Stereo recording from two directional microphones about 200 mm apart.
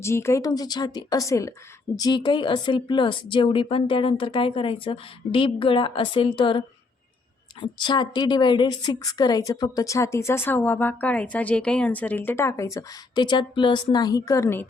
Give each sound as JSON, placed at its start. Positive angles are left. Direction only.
{"t": 0.0, "sound": "a woman's voice", "side_deg": 15}
{"t": 7.6, "sound": "a woman's voice", "side_deg": 20}